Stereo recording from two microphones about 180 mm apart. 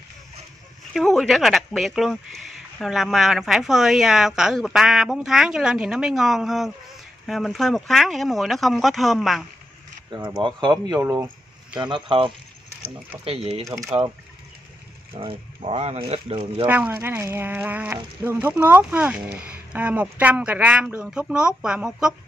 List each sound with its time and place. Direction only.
0.9 s speech: centre (ahead or behind)
10.1 s speech: 25° right (ahead or behind)
11.7 s speech: 25° right (ahead or behind)
13.7 s speech: 15° right (ahead or behind)
15.1 s speech: 30° right (ahead or behind)
16.6 s speech: 10° right (ahead or behind)